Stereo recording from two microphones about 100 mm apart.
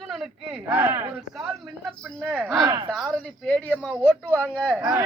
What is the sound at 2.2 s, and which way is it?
Speech, 10° right (ahead or behind).